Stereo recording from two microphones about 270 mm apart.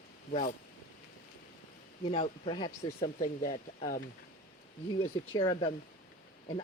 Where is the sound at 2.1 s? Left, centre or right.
Left.